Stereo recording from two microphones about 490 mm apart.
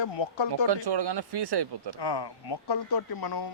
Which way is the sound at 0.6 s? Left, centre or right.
Right.